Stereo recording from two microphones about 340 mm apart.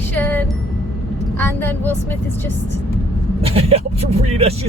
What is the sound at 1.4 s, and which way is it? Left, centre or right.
Speech, centre.